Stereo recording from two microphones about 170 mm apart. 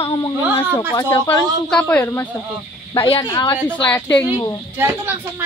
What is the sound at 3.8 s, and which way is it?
Speech, 10° left (ahead or behind).